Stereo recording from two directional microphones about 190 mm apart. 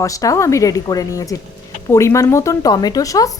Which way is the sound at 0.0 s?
15° left (ahead or behind).